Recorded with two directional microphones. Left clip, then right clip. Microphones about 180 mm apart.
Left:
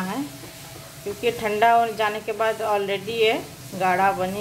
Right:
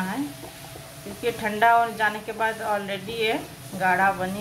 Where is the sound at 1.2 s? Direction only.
20° left (ahead or behind).